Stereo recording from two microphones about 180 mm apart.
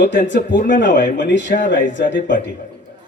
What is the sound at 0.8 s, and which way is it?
A man's voice, 45° left (ahead or behind).